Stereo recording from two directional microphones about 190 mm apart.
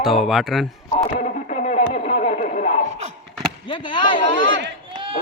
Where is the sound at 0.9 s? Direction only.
40° left (ahead or behind).